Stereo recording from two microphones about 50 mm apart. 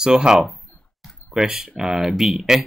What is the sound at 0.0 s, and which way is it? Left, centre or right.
Speech, centre.